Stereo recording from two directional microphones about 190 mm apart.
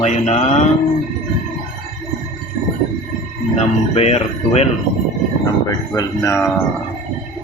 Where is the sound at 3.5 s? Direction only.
35° left (ahead or behind).